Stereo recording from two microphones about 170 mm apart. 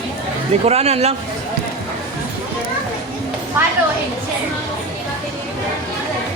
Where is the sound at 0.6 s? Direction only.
40° right (ahead or behind).